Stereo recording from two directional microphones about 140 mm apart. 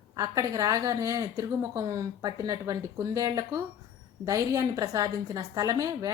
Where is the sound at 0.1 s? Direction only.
25° right (ahead or behind).